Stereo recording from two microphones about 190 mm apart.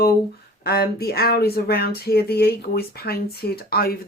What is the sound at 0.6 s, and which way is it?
Speech, 55° left (ahead or behind).